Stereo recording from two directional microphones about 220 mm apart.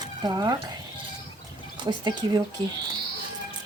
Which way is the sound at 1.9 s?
20° right (ahead or behind).